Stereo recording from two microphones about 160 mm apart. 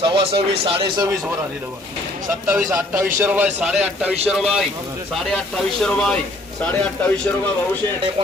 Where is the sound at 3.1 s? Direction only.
10° right (ahead or behind); by 7.5 s 10° left (ahead or behind).